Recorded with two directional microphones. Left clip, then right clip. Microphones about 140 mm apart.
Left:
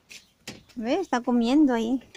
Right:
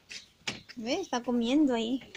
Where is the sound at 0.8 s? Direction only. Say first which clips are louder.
Left 6 dB; 55° left (ahead or behind); by 2.0 s 35° left (ahead or behind).